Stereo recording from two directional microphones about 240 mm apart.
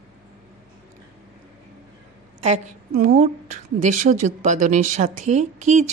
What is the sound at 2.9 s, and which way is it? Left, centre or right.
A woman's voice, right.